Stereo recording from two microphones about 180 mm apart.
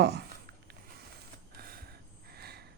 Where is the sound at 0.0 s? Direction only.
65° right (ahead or behind).